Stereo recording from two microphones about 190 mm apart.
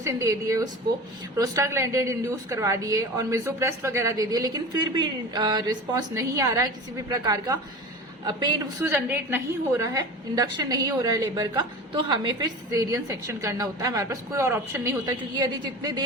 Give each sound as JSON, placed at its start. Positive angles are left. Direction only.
{"t": 0.0, "sound": "a woman's voice", "side_deg": -15}
{"t": 8.8, "sound": "a woman's voice", "side_deg": -10}